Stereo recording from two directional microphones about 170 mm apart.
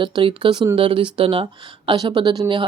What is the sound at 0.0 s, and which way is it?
Speech, 30° right (ahead or behind).